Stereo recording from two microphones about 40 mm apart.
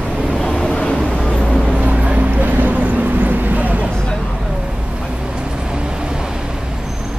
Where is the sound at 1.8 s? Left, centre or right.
Right.